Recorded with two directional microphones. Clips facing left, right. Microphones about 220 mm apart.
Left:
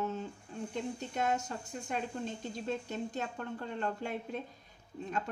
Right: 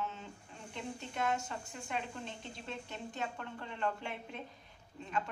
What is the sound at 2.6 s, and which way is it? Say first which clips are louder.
A woman's voice: left 8 dB; 40° left (ahead or behind).